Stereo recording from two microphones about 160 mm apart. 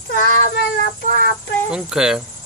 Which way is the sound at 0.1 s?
65° left (ahead or behind).